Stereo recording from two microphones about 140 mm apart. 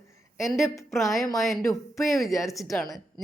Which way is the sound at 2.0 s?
Centre (ahead or behind).